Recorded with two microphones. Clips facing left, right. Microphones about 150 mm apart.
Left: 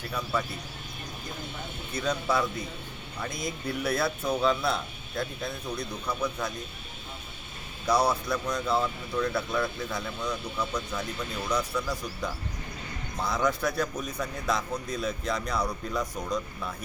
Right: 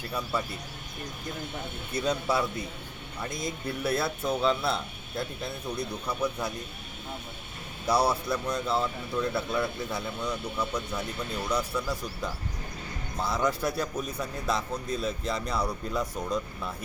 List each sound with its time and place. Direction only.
2.0 s speech: 10° right (ahead or behind)
7.9 s speech: 10° right (ahead or behind)
13.2 s speech: 5° right (ahead or behind)